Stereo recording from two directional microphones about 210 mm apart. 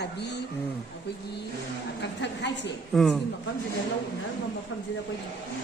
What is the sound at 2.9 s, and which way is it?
Speech, centre (ahead or behind).